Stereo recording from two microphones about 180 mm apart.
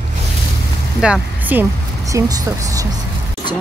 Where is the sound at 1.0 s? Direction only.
5° right (ahead or behind).